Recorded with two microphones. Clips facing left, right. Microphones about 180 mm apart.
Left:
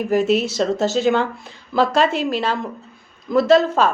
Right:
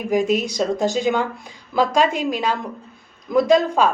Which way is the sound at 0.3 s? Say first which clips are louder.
Left 2 dB; 15° right (ahead or behind).